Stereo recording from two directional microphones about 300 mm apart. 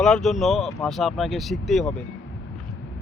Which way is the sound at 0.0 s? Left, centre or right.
Centre.